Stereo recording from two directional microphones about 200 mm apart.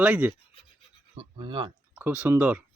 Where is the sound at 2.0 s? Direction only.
10° right (ahead or behind).